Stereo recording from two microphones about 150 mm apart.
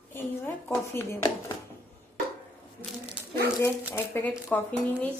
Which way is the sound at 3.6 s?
15° left (ahead or behind).